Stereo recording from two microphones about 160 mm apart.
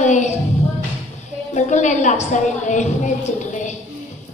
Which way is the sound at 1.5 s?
45° left (ahead or behind).